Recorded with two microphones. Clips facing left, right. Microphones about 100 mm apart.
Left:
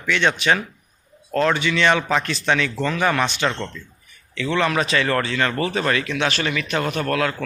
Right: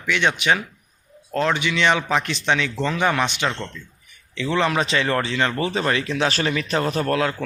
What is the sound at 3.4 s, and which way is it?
Speech, 5° left (ahead or behind).